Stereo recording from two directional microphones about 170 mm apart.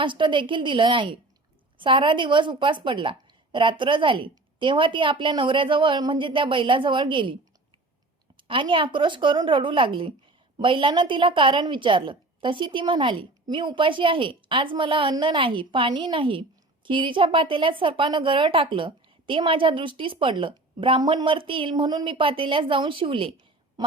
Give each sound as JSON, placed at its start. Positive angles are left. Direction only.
{"t": 0.0, "sound": "a woman's voice", "side_deg": -30}
{"t": 8.4, "sound": "a woman's voice", "side_deg": -30}